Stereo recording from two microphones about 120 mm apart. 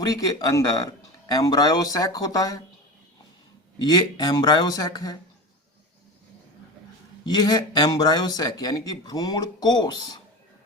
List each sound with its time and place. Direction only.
0.1 s speech: 30° left (ahead or behind)
3.8 s speech: 35° left (ahead or behind)
7.3 s speech: 35° left (ahead or behind)